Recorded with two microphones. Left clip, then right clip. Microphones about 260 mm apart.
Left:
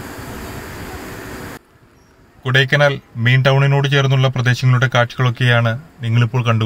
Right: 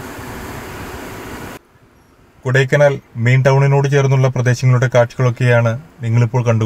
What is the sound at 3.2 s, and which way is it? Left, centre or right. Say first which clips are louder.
Speech: right 1 dB; centre.